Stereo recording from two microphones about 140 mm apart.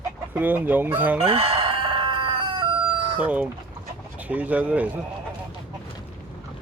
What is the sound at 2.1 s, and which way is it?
Chicken, 35° right (ahead or behind).